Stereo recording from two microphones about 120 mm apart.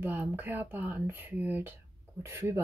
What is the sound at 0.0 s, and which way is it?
Speech, 15° right (ahead or behind).